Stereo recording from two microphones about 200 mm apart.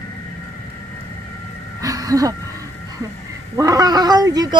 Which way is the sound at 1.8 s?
15° right (ahead or behind).